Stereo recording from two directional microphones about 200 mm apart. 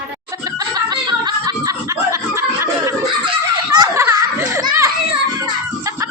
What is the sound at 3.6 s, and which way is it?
Children playing, 20° right (ahead or behind).